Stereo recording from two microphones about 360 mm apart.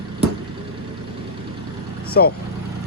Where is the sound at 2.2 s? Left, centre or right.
Left.